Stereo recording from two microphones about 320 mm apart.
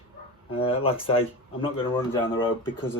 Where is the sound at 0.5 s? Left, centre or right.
Centre.